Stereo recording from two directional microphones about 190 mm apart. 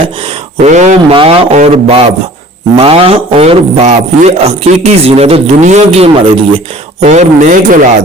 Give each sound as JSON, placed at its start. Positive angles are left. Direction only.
{"t": 0.6, "sound": "a man's voice", "side_deg": -40}